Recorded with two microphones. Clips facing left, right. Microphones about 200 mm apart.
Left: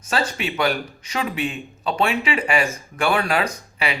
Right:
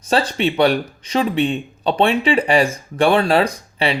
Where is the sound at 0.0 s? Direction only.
35° right (ahead or behind).